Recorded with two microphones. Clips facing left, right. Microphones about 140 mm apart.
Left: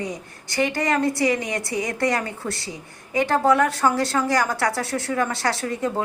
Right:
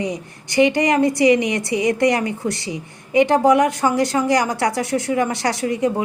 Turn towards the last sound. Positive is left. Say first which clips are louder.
# right 5 dB
turn(degrees=-15)  # may be behind; listen again after turning